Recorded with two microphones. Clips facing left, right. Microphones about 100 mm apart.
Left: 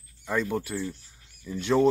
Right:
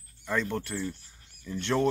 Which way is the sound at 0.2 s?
10° left (ahead or behind).